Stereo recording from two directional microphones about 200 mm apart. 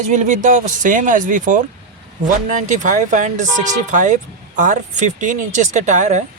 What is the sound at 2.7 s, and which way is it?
Speech, 40° right (ahead or behind).